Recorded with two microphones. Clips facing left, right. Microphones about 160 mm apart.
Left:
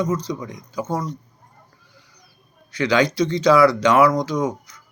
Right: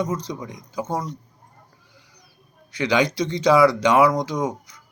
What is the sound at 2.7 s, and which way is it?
Speech, 20° right (ahead or behind).